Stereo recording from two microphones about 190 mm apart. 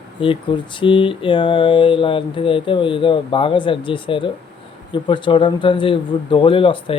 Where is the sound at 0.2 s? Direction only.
25° left (ahead or behind).